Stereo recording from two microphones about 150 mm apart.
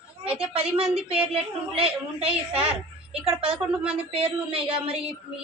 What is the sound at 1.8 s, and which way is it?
Speech, 40° right (ahead or behind).